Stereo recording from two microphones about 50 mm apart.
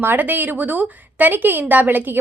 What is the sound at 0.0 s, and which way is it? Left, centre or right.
A woman's voice, right.